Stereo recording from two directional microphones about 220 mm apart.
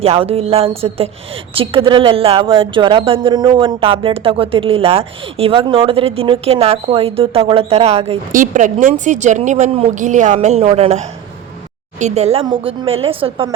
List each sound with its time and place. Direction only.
0.0 s a woman's voice: 25° right (ahead or behind)